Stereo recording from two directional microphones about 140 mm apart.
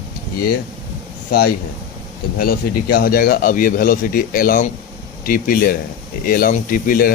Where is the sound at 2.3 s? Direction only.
90° left.